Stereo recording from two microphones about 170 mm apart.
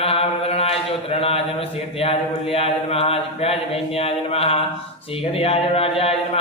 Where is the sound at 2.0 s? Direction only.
35° left (ahead or behind).